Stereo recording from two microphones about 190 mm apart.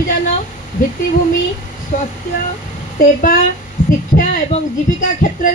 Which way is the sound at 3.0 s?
50° left (ahead or behind).